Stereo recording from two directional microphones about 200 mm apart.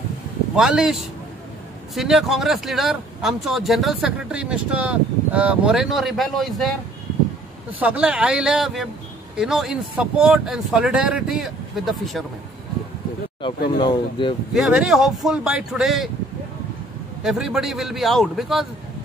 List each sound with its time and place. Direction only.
0.6 s speech: 5° right (ahead or behind)
7.8 s speech: 5° right (ahead or behind)
13.7 s speech: 25° left (ahead or behind)
14.5 s speech: 5° right (ahead or behind)
17.2 s speech: centre (ahead or behind)